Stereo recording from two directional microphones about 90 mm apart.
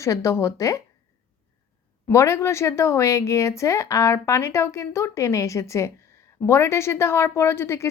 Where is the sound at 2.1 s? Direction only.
30° left (ahead or behind).